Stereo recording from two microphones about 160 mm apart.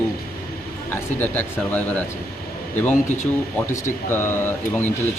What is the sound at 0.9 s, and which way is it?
Speech, 10° left (ahead or behind).